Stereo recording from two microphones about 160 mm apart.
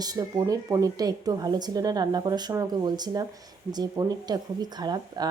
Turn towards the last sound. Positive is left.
turn(degrees=-25)  # may be behind; listen again after turning